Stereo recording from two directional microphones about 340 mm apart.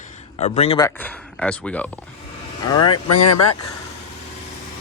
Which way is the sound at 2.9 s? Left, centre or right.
Left.